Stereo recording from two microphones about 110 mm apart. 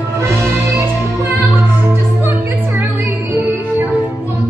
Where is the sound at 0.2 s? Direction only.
25° right (ahead or behind).